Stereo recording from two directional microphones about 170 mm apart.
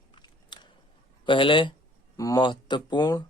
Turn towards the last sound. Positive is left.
turn(degrees=25)  # may be behind; listen again after turning